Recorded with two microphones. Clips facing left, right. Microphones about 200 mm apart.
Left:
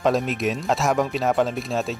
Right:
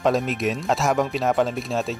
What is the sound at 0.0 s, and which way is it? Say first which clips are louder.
Speech: even; centre (ahead or behind).